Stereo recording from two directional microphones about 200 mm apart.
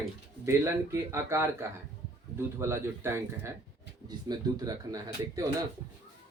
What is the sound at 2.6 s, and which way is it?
Speech, 10° right (ahead or behind).